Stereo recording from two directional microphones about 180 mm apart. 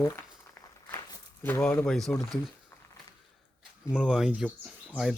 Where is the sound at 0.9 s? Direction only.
10° left (ahead or behind).